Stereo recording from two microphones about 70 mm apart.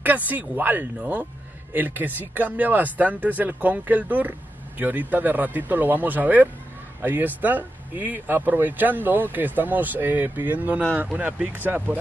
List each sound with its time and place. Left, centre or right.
0.0 s speech: right